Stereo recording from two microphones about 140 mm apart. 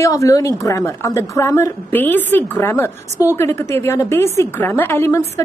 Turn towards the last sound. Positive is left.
turn(degrees=15)  # may be behind; listen again after turning